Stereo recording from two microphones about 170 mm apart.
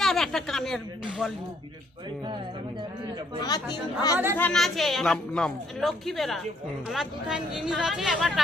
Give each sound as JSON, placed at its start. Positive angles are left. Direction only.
{"t": 0.0, "sound": "a sound", "side_deg": 0}
{"t": 1.2, "sound": "speech", "side_deg": -5}
{"t": 3.4, "sound": "speech", "side_deg": 25}
{"t": 4.4, "sound": "speech", "side_deg": 5}